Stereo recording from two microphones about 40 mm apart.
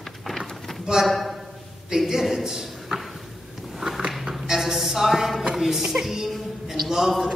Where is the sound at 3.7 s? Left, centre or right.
Centre.